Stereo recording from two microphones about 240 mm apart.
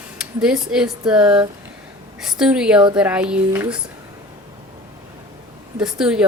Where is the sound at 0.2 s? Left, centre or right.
Centre.